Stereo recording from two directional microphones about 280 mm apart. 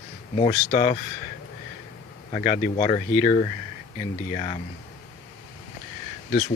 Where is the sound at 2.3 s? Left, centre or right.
Left.